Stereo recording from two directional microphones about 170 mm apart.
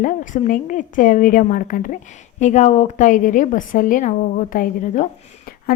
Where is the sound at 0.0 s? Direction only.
50° left (ahead or behind).